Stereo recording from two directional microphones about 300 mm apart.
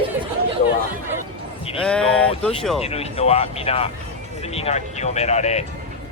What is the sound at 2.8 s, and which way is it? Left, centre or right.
Speech, centre.